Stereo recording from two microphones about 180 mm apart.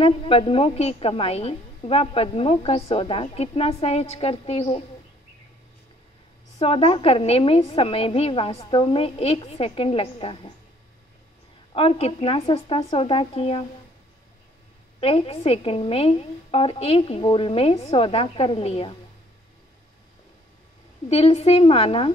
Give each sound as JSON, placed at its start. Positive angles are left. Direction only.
{"t": 0.0, "sound": "a woman's voice", "side_deg": 30}
{"t": 6.6, "sound": "a woman's voice", "side_deg": 30}
{"t": 11.7, "sound": "a woman's voice", "side_deg": 30}
{"t": 15.0, "sound": "a woman's voice", "side_deg": 35}
{"t": 21.1, "sound": "a woman's voice", "side_deg": 35}